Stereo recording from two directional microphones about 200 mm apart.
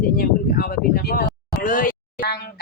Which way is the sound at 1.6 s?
40° left (ahead or behind).